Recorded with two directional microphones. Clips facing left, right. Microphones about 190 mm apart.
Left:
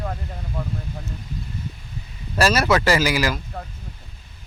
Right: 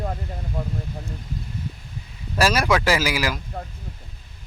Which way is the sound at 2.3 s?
10° right (ahead or behind).